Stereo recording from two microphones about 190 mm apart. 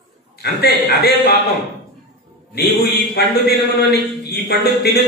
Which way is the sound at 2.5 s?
60° left (ahead or behind).